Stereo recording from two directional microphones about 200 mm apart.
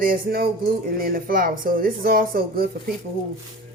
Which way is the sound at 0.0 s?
45° right (ahead or behind).